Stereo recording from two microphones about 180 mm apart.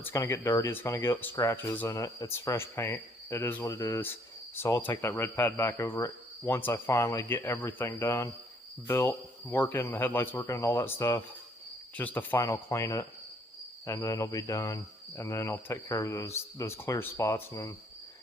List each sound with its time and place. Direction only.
0.0 s speech: 15° left (ahead or behind)